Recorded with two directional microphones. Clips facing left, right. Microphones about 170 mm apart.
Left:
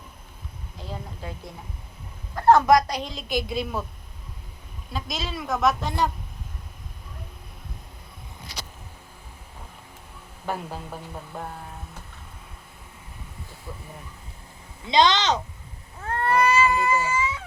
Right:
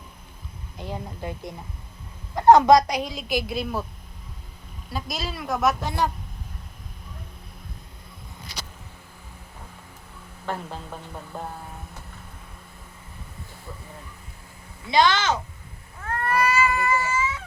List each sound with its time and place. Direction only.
0.8 s a woman's voice: 15° right (ahead or behind)
2.9 s a woman's voice: 10° right (ahead or behind)
4.9 s speech: 5° right (ahead or behind)
10.4 s speech: 10° left (ahead or behind)
14.8 s speech: 20° left (ahead or behind)
16.0 s cat: 30° left (ahead or behind)